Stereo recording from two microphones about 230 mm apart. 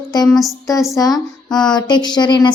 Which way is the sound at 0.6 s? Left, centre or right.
Centre.